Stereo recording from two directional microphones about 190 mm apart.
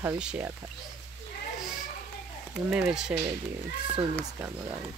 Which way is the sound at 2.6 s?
5° right (ahead or behind).